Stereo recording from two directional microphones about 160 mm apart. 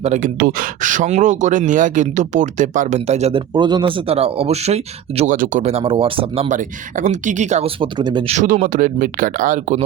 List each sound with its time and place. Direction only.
0.0 s speech: 50° right (ahead or behind); by 6.5 s 35° right (ahead or behind)
6.5 s speech: 50° right (ahead or behind)
7.8 s speech: 30° right (ahead or behind)
8.3 s speech: 50° right (ahead or behind)